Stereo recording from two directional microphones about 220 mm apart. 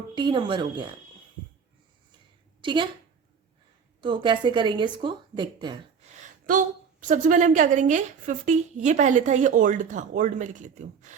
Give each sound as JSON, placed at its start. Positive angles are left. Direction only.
{"t": 0.1, "sound": "a woman's voice", "side_deg": -20}
{"t": 2.6, "sound": "a woman's voice", "side_deg": -20}
{"t": 4.0, "sound": "a woman's voice", "side_deg": -20}
{"t": 6.4, "sound": "a woman's voice", "side_deg": -40}